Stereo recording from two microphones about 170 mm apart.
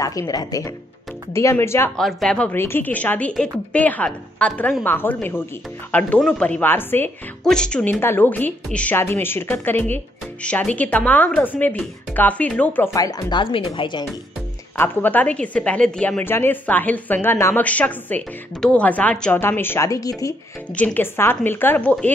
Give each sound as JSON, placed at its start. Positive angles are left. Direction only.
{"t": 0.0, "sound": "a woman's voice", "side_deg": 20}
{"t": 2.0, "sound": "a woman's voice", "side_deg": 0}
{"t": 14.8, "sound": "a woman's voice", "side_deg": 10}
{"t": 20.7, "sound": "a woman's voice", "side_deg": 10}